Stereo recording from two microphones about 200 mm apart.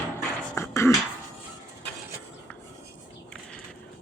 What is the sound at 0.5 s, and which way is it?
Beatboxing, 15° left (ahead or behind).